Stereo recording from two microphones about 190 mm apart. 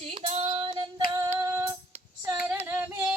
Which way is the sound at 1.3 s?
15° right (ahead or behind).